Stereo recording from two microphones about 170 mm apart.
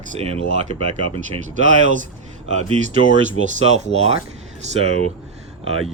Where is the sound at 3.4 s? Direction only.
40° right (ahead or behind).